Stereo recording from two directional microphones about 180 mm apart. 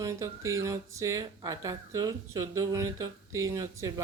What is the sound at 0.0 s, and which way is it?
A woman's voice, 15° right (ahead or behind).